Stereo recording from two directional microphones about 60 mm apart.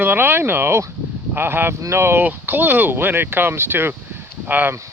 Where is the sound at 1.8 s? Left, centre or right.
Right.